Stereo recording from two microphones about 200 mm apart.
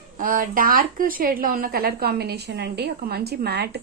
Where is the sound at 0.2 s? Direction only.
45° right (ahead or behind).